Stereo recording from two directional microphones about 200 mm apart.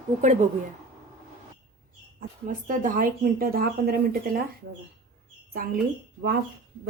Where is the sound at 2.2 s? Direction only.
40° right (ahead or behind).